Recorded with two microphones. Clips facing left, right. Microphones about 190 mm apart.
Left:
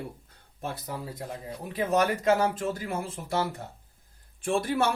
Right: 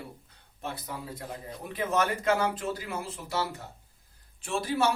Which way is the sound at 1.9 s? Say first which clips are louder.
Left 3 dB; 35° left (ahead or behind).